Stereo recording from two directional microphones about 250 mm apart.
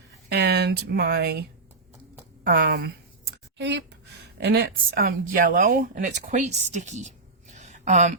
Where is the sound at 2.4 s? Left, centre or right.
Right.